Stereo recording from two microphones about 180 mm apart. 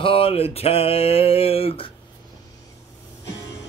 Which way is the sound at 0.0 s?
30° left (ahead or behind).